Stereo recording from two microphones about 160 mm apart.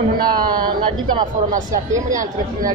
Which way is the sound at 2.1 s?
55° right (ahead or behind).